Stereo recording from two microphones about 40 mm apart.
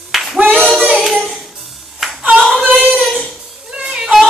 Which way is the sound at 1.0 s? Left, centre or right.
Centre.